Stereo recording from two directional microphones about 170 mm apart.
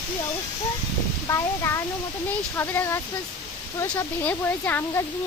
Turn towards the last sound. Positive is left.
turn(degrees=10)  # may be behind; listen again after turning